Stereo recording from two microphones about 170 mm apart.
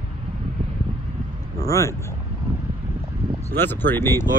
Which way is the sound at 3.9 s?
15° left (ahead or behind).